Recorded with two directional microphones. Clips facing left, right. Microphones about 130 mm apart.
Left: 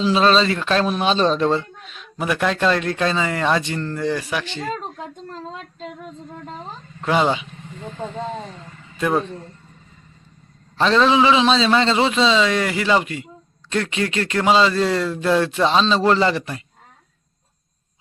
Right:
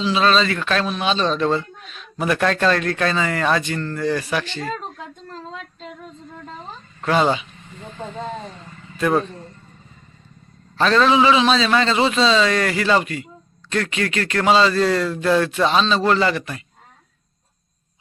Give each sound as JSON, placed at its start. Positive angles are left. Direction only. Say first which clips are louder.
{"t": 0.0, "sound": "a man's voice", "louder": "left 2 dB", "side_deg": 35}
{"t": 0.9, "sound": "a man's voice", "louder": "left 3 dB", "side_deg": 40}
{"t": 1.4, "sound": "speech", "louder": "left 1 dB", "side_deg": 25}
{"t": 7.0, "sound": "speech", "louder": "right 1 dB", "side_deg": 15}
{"t": 9.0, "sound": "a man's voice", "louder": "right 1 dB", "side_deg": 10}
{"t": 10.8, "sound": "a man's voice", "louder": "even", "side_deg": 20}